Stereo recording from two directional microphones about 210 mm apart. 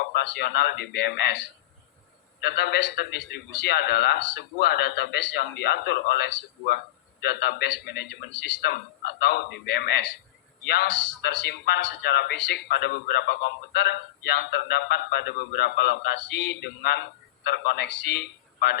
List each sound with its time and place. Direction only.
0.1 s speech: 50° left (ahead or behind)
2.4 s a man's voice: 50° left (ahead or behind)